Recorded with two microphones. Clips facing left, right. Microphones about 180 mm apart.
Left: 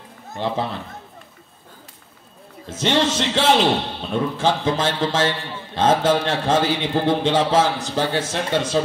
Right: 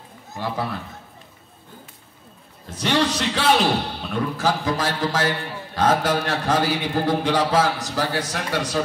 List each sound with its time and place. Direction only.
0.4 s a man's voice: 25° left (ahead or behind)
2.8 s a man's voice: 25° left (ahead or behind)